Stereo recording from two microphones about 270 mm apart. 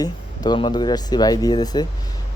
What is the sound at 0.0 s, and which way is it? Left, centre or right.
Speech, centre.